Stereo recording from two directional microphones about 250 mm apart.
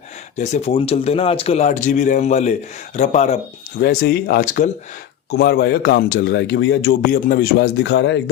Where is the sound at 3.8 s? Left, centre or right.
Left.